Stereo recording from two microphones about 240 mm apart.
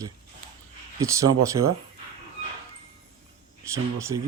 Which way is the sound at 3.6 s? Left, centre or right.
Centre.